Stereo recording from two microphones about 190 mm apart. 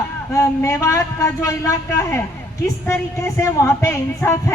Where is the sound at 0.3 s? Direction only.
15° left (ahead or behind).